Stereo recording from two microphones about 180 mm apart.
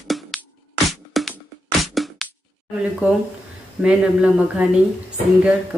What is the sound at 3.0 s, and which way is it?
Speech, 5° right (ahead or behind).